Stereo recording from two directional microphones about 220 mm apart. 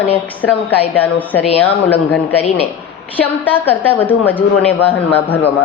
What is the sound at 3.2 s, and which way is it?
Speech, 10° left (ahead or behind).